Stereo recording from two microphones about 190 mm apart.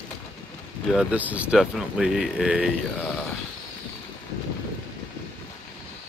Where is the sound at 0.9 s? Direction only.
5° right (ahead or behind).